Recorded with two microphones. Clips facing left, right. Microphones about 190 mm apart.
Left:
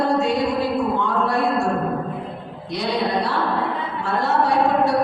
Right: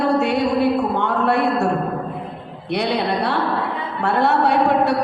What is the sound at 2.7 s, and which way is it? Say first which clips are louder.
A woman's voice: right 2 dB; 65° right (ahead or behind).